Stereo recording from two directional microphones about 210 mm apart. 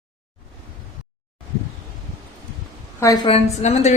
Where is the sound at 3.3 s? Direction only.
30° left (ahead or behind).